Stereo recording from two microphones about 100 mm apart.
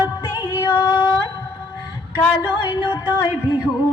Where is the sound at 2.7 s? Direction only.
45° left (ahead or behind).